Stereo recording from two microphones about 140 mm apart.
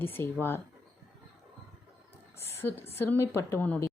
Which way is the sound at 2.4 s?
15° left (ahead or behind).